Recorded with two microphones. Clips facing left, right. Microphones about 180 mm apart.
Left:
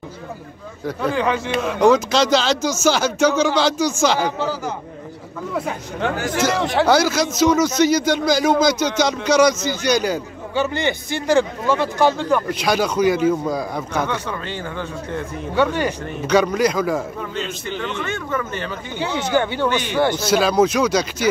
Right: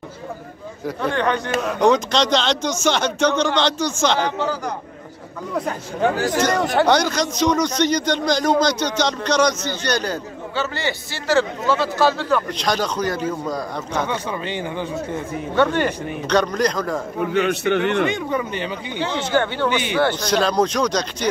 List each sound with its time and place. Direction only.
0.8 s a man's voice: 5° left (ahead or behind)
14.0 s speech: 15° right (ahead or behind)
15.5 s a man's voice: 10° left (ahead or behind)
17.2 s a man's voice: 60° right (ahead or behind)
18.0 s speech: 15° right (ahead or behind)
18.9 s a man's voice: 10° left (ahead or behind)
19.7 s speech: 15° right (ahead or behind)
20.0 s a man's voice: 10° left (ahead or behind)